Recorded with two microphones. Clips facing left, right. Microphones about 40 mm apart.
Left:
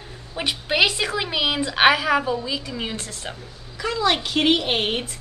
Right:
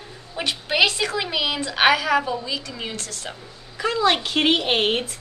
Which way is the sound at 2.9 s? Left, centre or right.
Left.